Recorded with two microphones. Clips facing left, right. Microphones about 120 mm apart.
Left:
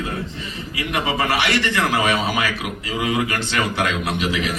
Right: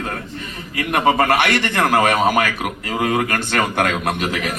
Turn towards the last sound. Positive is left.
turn(degrees=-50)  # may be behind; listen again after turning